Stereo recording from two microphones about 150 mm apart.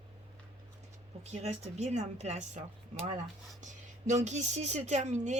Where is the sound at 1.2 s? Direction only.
50° right (ahead or behind).